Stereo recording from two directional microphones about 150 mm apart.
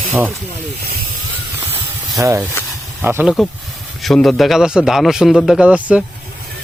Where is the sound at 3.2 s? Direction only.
5° left (ahead or behind).